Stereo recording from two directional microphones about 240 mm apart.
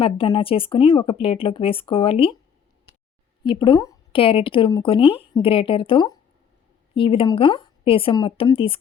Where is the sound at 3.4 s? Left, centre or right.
Centre.